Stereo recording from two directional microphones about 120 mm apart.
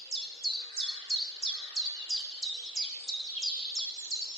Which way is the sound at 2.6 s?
Centre (ahead or behind).